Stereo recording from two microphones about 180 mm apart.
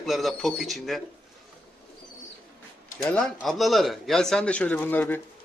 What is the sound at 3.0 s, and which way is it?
A man's voice, 5° left (ahead or behind).